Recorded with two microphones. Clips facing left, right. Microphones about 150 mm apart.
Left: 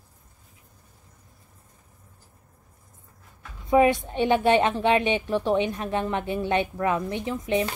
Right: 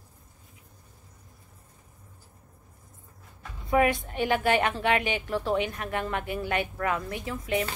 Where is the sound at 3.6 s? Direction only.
20° left (ahead or behind).